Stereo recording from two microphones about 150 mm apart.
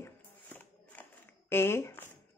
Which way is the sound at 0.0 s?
10° left (ahead or behind).